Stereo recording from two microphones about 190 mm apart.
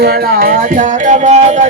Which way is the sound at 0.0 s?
50° right (ahead or behind).